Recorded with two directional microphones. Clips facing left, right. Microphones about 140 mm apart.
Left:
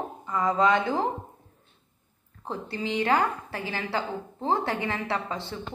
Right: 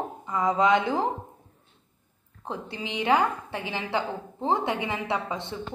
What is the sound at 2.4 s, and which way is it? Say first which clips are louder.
A woman's voice: left 2 dB; 15° right (ahead or behind).